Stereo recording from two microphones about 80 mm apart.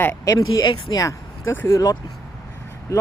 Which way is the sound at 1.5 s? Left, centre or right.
Left.